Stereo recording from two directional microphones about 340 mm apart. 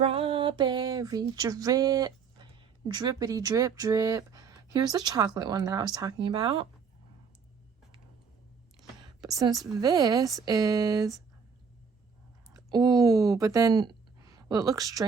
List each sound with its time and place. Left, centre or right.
0.0 s a sound: centre
8.8 s whispering: centre
9.8 s speech: centre
12.5 s speech: centre